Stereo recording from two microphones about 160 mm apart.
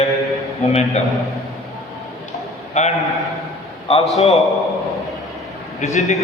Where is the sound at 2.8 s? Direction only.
45° left (ahead or behind).